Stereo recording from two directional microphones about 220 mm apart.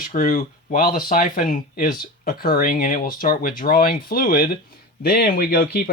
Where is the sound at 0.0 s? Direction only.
40° left (ahead or behind).